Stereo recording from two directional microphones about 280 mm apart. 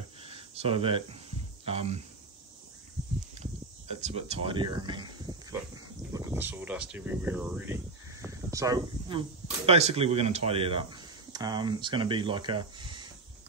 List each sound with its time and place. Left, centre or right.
0.2 s a sound: right
1.7 s speech: right
3.9 s speech: right